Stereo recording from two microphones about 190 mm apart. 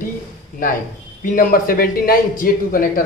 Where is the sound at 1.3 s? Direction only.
45° left (ahead or behind).